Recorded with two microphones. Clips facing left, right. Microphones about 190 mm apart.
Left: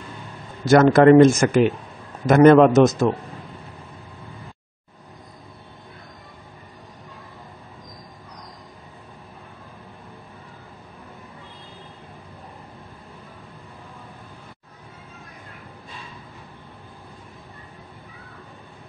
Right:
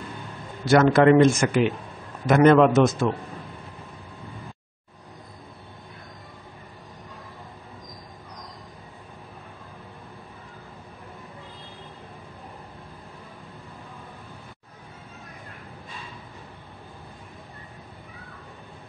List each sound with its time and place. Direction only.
0.7 s a man's voice: 45° left (ahead or behind)